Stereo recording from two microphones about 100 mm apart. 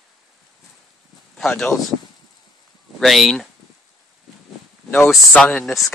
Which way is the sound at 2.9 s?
Centre (ahead or behind).